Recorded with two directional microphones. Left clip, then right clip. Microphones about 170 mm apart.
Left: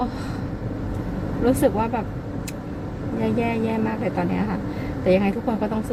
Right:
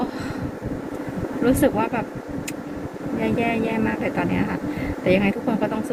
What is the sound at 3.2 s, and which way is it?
Speech, 15° left (ahead or behind).